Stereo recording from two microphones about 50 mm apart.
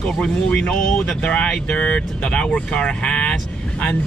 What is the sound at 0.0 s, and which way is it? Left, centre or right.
Speech, centre.